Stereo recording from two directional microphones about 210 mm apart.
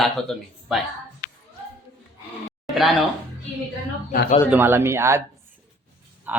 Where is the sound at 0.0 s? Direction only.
Centre (ahead or behind).